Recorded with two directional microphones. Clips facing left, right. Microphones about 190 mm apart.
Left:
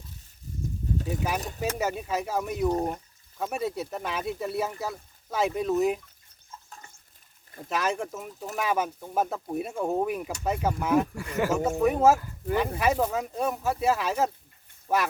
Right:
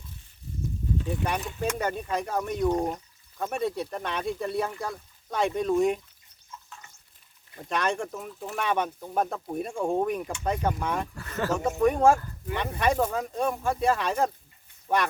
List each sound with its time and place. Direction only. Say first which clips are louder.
1.4 s speech: right 1 dB; 35° left (ahead or behind)
1.8 s speech: even; 5° left (ahead or behind)
6.7 s a sound: left 1 dB; 40° left (ahead or behind)
7.7 s speech: even; 5° left (ahead or behind)